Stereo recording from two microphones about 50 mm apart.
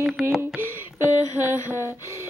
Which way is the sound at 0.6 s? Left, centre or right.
Right.